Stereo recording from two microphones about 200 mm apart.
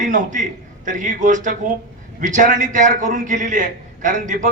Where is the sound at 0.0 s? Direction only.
40° right (ahead or behind).